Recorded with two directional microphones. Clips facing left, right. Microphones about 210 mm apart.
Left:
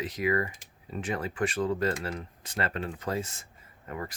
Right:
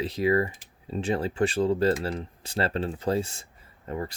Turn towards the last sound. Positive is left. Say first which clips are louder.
# right 5 dB
turn(degrees=-30)  # may be behind; listen again after turning